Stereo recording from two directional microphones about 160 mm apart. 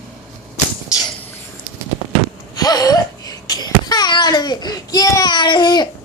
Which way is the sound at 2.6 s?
25° left (ahead or behind).